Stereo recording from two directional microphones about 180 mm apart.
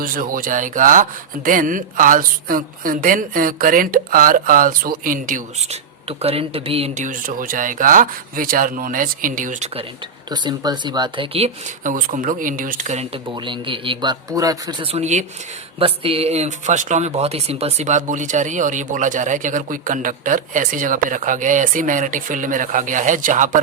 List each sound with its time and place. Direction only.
0.0 s a woman's voice: 50° right (ahead or behind)
10.2 s speech: 25° right (ahead or behind); by 13.3 s 40° right (ahead or behind)
13.3 s a woman's voice: 25° right (ahead or behind); by 23.6 s 45° right (ahead or behind)